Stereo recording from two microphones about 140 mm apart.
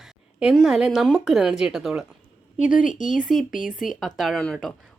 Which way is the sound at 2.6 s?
70° left (ahead or behind).